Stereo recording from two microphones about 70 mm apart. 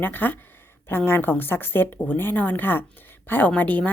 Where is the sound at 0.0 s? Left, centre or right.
Left.